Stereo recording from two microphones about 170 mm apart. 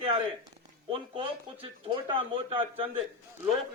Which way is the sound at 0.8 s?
30° right (ahead or behind).